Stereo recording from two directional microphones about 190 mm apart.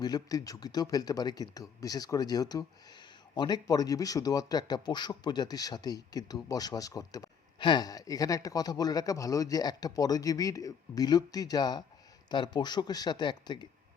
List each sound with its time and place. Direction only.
0.0 s speech: 20° left (ahead or behind)